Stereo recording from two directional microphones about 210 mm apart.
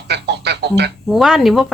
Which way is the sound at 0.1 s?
55° right (ahead or behind).